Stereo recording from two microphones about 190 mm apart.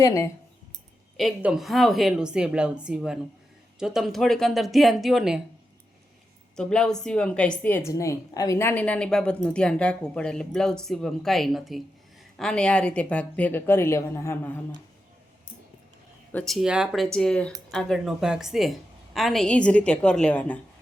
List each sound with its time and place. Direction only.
0.0 s speech: 15° left (ahead or behind)
1.1 s speech: 5° right (ahead or behind)
6.6 s speech: 5° left (ahead or behind)
16.3 s speech: centre (ahead or behind)